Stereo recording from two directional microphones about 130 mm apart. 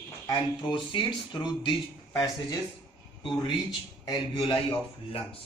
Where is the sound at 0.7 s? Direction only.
35° left (ahead or behind).